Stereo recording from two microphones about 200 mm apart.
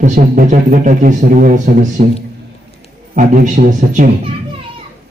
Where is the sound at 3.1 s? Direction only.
45° right (ahead or behind).